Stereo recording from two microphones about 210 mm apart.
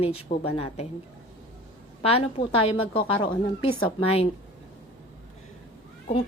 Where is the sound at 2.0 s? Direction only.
25° left (ahead or behind).